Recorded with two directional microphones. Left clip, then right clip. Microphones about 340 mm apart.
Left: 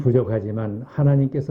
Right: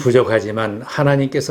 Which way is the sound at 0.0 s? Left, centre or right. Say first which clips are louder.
Right 7 dB; centre.